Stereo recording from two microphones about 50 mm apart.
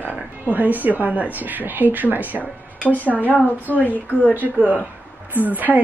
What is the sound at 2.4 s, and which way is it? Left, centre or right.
Speech, left.